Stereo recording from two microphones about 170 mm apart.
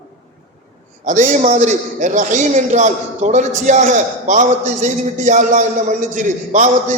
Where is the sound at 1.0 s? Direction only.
50° right (ahead or behind).